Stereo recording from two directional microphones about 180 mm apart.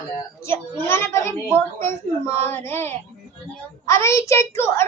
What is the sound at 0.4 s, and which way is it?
A child's voice, 15° left (ahead or behind).